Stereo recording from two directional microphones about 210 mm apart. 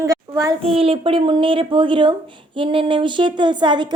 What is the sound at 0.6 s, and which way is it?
Speech, 25° right (ahead or behind).